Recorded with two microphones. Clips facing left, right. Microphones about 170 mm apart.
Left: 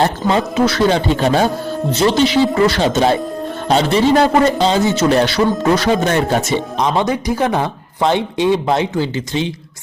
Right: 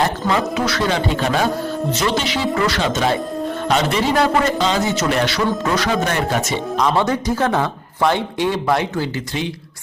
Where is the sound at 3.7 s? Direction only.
30° left (ahead or behind).